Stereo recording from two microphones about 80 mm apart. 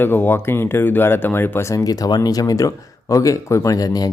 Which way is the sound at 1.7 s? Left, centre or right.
Left.